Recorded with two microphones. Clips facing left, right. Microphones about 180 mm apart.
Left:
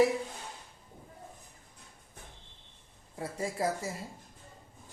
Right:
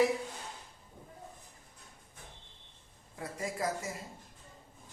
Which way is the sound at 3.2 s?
30° left (ahead or behind).